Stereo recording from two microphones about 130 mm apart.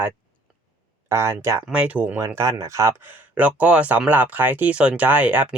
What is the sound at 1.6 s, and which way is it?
Speech, 10° right (ahead or behind).